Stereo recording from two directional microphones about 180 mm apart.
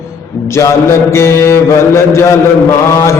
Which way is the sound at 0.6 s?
15° left (ahead or behind).